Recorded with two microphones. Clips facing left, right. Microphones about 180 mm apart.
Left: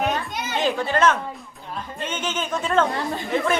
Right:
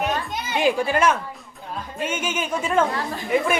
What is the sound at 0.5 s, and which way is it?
Speech, 10° right (ahead or behind).